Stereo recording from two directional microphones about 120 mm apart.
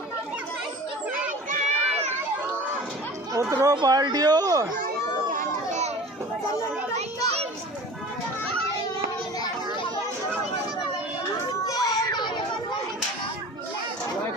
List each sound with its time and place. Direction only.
1.5 s run: 65° right (ahead or behind)
3.3 s a sound: 25° right (ahead or behind)
3.7 s speech: 35° right (ahead or behind)
5.3 s run: 90° right
11.6 s children playing: 30° left (ahead or behind)